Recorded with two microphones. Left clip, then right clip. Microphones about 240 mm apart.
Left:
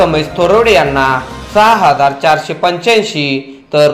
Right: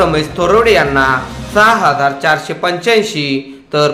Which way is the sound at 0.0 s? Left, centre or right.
Centre.